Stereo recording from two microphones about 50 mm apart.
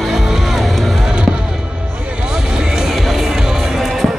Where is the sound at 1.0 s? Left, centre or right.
Centre.